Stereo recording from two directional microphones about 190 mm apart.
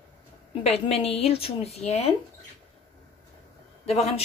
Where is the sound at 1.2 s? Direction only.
30° left (ahead or behind).